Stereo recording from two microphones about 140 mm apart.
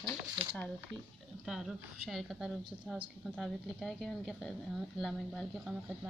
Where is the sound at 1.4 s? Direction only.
5° right (ahead or behind).